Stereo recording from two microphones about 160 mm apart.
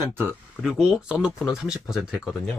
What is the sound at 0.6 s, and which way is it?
Speech, centre (ahead or behind).